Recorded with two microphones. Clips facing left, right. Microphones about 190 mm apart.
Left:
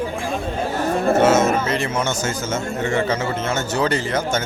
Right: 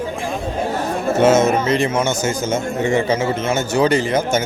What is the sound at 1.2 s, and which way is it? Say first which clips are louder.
Speech: right 6 dB; 15° right (ahead or behind).